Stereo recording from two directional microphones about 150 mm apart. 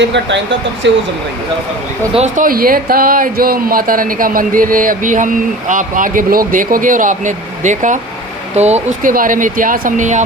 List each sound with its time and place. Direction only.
2.1 s speech: 55° right (ahead or behind)